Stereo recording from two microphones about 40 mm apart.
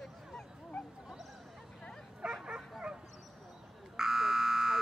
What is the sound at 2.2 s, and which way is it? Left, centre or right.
Bow-wow, right.